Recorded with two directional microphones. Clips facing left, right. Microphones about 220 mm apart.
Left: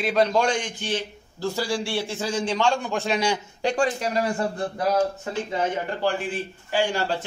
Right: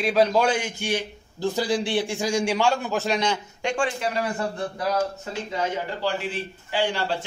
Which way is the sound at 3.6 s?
35° left (ahead or behind).